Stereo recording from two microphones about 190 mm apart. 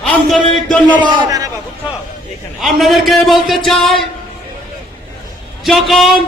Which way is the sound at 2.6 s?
Centre (ahead or behind).